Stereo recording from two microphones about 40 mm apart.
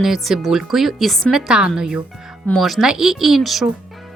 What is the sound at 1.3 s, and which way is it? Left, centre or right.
Speech, centre.